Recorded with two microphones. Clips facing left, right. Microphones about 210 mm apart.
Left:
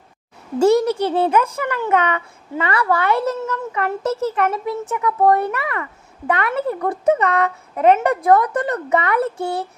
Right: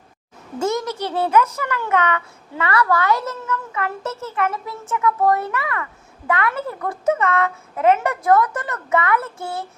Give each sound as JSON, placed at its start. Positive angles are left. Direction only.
{"t": 0.6, "sound": "a child's voice", "side_deg": 35}
{"t": 0.9, "sound": "speech", "side_deg": 10}
{"t": 1.3, "sound": "a child's voice", "side_deg": 30}